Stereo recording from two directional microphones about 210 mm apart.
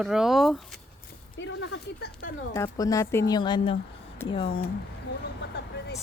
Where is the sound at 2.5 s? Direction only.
15° left (ahead or behind).